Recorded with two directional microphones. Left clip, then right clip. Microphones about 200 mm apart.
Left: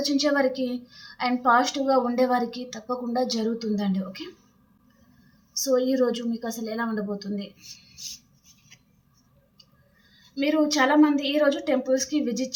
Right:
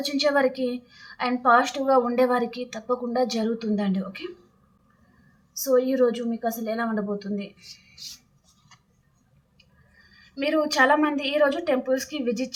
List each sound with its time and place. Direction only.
0.2 s a woman's voice: 15° right (ahead or behind)
5.6 s a woman's voice: 10° right (ahead or behind)
10.3 s a woman's voice: 20° right (ahead or behind)